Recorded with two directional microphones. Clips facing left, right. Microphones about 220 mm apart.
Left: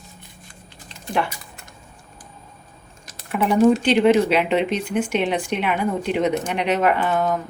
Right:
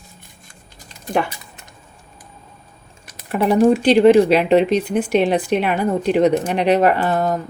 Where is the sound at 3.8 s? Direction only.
40° right (ahead or behind).